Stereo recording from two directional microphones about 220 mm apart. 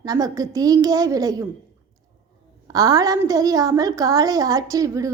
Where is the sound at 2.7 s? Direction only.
15° right (ahead or behind).